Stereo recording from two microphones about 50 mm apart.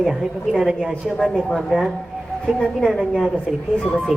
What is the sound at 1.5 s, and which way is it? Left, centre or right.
A woman's voice, centre.